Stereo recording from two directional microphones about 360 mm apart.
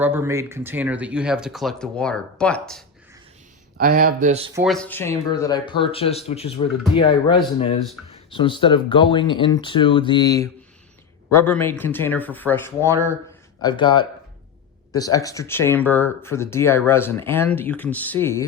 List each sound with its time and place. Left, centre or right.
0.0 s speech: centre
3.8 s speech: right
4.6 s speech: centre